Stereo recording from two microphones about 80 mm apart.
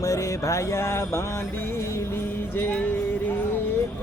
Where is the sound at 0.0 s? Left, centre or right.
Left.